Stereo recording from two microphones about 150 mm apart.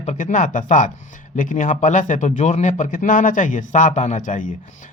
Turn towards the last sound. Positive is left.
turn(degrees=55)  # may be behind; listen again after turning